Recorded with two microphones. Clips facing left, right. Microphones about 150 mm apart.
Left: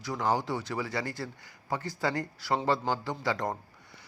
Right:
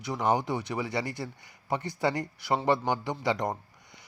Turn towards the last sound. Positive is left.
turn(degrees=-20)  # may be behind; listen again after turning